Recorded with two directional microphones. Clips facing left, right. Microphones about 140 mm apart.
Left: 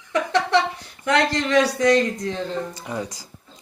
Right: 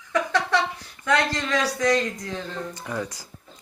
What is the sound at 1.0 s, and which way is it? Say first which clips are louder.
Speech: left 3 dB; 20° left (ahead or behind).